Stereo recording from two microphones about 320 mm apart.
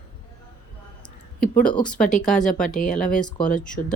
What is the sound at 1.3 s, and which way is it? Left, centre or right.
Speech, left.